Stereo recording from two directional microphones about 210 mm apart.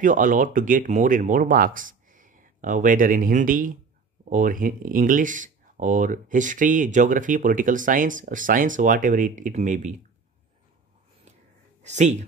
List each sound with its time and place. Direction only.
0.0 s speech: 40° right (ahead or behind)
11.8 s speech: 35° right (ahead or behind)